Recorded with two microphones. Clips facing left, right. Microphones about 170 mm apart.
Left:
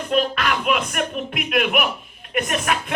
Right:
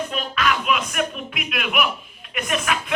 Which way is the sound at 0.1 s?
50° left (ahead or behind).